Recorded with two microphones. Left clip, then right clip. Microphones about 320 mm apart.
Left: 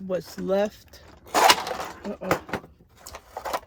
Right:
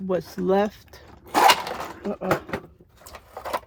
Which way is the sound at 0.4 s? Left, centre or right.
Centre.